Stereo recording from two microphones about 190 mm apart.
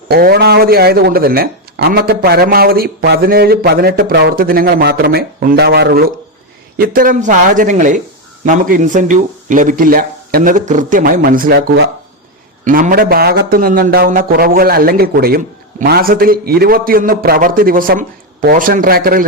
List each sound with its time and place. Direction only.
0.1 s speech: 55° right (ahead or behind)
12.6 s speech: 45° right (ahead or behind)